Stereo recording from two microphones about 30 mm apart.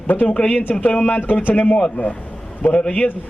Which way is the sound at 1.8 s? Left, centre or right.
Left.